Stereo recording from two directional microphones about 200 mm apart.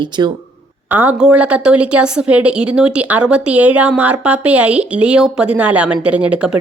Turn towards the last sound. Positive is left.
turn(degrees=-5)  # may be behind; listen again after turning